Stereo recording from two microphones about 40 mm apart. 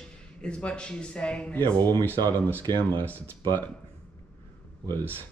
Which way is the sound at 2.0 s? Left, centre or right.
Left.